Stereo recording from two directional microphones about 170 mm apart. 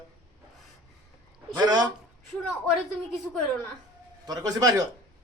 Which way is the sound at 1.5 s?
25° right (ahead or behind).